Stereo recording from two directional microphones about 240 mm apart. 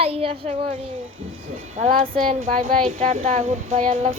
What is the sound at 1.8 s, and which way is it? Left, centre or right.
Speech, right.